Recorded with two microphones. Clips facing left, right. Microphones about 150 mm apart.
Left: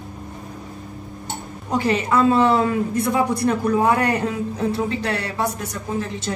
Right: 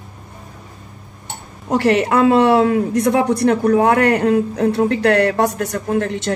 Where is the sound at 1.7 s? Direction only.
70° right (ahead or behind).